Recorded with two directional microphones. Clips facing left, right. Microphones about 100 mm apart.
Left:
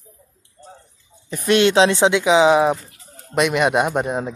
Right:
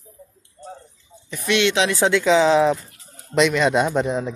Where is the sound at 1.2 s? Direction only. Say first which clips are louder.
Left 4 dB; 40° left (ahead or behind).